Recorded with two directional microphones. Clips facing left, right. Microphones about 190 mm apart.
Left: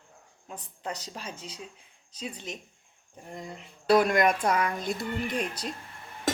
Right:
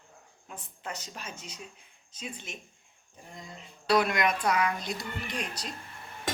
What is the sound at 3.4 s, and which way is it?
Speech, 50° left (ahead or behind).